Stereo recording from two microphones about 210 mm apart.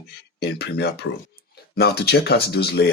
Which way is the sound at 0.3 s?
50° left (ahead or behind).